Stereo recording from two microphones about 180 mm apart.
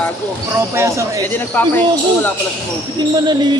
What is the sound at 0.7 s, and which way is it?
Speech, 15° right (ahead or behind).